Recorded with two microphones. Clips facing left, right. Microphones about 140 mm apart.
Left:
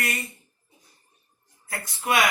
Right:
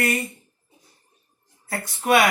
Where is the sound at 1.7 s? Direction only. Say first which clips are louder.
Right 6 dB; 50° right (ahead or behind).